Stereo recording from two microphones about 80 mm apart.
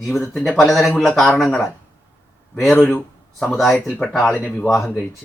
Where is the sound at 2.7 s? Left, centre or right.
Left.